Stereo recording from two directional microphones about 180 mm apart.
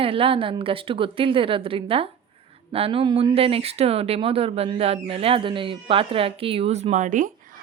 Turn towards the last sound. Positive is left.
turn(degrees=-45)  # may be behind; listen again after turning